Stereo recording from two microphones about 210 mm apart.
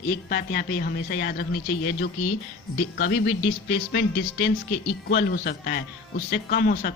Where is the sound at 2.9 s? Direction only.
50° left (ahead or behind).